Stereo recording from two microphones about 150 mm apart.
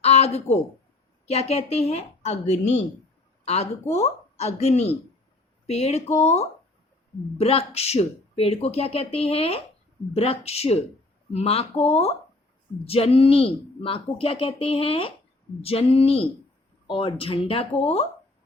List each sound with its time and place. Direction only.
0.0 s a woman's voice: 45° left (ahead or behind)